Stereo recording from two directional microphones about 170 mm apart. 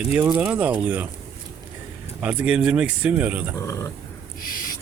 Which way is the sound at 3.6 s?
20° left (ahead or behind).